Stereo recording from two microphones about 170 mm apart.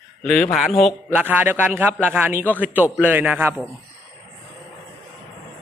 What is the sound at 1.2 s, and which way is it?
A man's voice, 10° right (ahead or behind).